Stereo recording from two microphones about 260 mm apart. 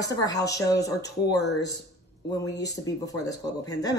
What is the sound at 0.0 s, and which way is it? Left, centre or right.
Speech, centre.